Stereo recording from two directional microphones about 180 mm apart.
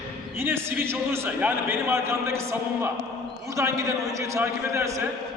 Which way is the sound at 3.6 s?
15° right (ahead or behind).